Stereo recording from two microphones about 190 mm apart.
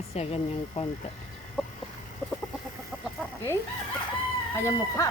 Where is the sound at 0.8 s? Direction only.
30° left (ahead or behind).